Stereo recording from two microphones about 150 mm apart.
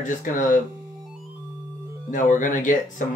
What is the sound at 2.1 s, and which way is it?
Speech, 60° left (ahead or behind).